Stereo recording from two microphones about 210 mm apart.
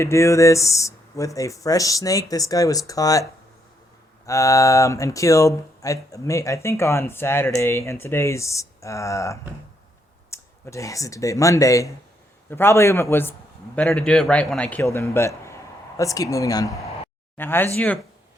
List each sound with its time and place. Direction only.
0.0 s speech: 15° left (ahead or behind)
4.3 s speech: 15° left (ahead or behind)